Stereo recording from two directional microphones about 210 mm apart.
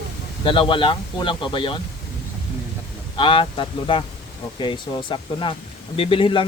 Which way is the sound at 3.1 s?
25° left (ahead or behind).